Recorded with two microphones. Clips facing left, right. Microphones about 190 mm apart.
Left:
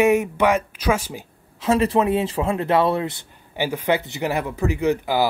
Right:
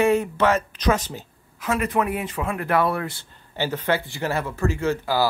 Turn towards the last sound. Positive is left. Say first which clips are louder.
# left 2 dB
turn(degrees=15)  # may be behind; listen again after turning